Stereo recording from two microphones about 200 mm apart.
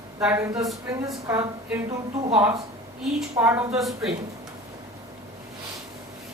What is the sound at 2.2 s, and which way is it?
Speech, 25° right (ahead or behind).